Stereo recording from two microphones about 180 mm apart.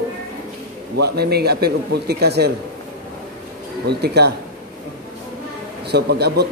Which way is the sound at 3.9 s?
65° right (ahead or behind).